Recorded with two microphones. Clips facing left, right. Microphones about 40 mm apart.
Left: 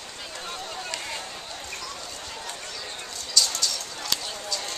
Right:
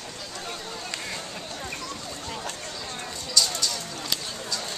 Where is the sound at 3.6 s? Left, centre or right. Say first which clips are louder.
Even; centre.